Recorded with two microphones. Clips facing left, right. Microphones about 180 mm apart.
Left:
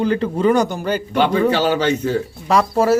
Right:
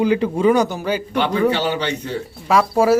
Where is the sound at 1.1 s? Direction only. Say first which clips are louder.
Left 2 dB; 45° left (ahead or behind).